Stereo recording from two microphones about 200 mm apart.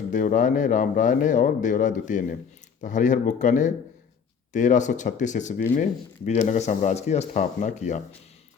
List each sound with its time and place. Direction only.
0.1 s speech: 40° left (ahead or behind)